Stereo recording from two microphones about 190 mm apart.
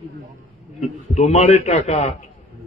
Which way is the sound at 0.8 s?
35° left (ahead or behind).